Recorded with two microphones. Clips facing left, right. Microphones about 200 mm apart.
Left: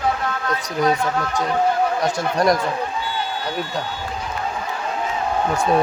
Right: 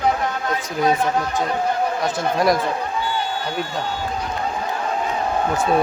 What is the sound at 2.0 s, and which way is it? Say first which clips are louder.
Speech: right 1 dB; 5° right (ahead or behind).